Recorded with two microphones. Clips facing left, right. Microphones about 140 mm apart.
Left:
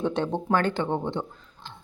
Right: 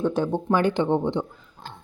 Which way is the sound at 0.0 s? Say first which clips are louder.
Right 3 dB; 5° right (ahead or behind).